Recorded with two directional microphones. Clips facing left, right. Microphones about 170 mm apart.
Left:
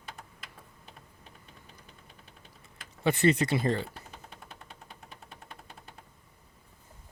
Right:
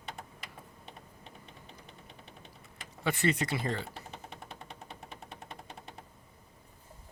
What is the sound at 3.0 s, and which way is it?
Speech, 25° left (ahead or behind).